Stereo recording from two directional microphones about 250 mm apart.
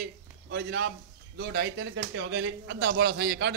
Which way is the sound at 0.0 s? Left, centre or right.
Right.